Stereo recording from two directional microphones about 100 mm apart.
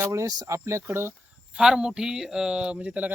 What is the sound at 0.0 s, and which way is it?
Speech, 30° right (ahead or behind).